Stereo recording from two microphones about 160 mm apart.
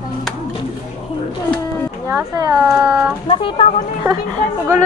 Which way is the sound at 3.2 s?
35° left (ahead or behind).